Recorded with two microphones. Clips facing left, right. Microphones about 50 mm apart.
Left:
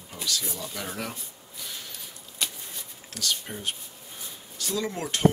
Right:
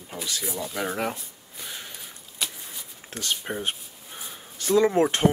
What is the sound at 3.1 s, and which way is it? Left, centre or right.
Speech, right.